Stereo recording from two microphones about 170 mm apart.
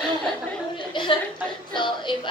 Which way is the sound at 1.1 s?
30° left (ahead or behind).